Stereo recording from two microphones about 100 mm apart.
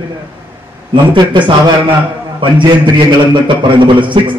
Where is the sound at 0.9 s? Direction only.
55° right (ahead or behind).